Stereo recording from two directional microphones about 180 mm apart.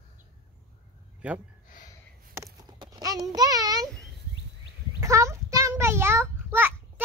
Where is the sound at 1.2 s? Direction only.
5° right (ahead or behind).